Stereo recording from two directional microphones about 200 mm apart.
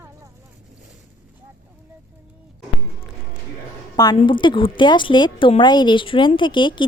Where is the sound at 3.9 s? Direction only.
20° left (ahead or behind).